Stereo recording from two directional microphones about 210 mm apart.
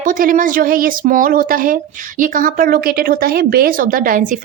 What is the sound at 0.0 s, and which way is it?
Speech, 40° right (ahead or behind).